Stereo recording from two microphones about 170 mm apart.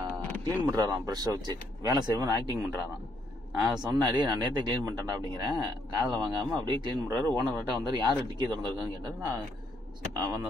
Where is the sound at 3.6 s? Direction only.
25° right (ahead or behind).